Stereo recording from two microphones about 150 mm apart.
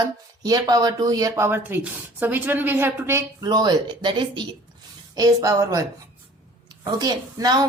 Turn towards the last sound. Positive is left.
turn(degrees=-25)  # may be behind; listen again after turning